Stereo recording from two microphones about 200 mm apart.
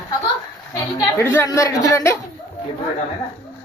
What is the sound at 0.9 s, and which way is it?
A woman's voice, 10° left (ahead or behind).